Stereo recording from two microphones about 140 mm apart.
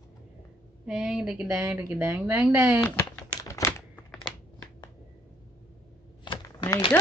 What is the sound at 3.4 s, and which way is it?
Typewriter, 25° left (ahead or behind).